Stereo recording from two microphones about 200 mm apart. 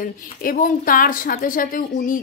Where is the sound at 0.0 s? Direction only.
45° left (ahead or behind).